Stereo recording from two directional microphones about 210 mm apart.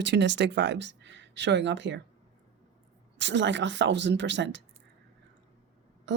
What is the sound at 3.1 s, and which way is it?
A woman's voice, 60° right (ahead or behind).